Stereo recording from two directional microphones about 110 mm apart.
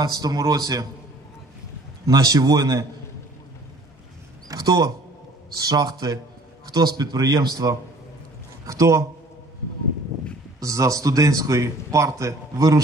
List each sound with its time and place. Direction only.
0.0 s a man's voice: 35° right (ahead or behind)
2.0 s a man's voice: 30° right (ahead or behind)
4.5 s a man's voice: 35° right (ahead or behind)
10.6 s speech: 30° right (ahead or behind)